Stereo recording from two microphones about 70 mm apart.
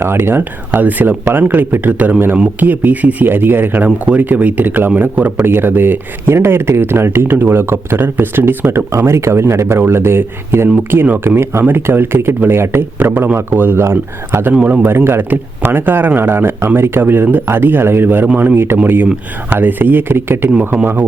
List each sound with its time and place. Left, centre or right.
0.0 s speech: right